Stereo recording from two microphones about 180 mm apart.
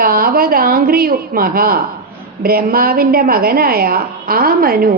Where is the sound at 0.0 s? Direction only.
55° right (ahead or behind).